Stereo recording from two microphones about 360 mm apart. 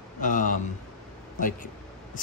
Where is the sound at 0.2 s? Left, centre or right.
Left.